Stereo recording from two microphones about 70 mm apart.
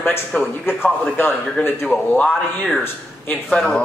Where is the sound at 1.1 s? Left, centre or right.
Left.